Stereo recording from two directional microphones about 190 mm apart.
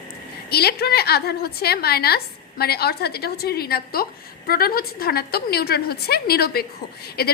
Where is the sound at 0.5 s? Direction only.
55° left (ahead or behind).